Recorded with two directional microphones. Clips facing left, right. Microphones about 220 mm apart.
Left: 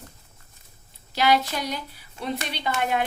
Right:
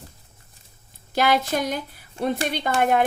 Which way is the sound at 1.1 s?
50° right (ahead or behind).